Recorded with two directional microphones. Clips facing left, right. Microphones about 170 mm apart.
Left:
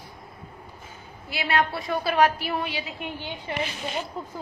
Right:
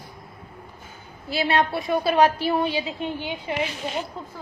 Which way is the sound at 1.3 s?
30° right (ahead or behind).